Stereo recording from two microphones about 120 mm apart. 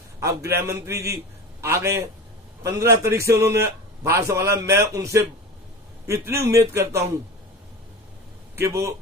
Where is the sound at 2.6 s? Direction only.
25° right (ahead or behind).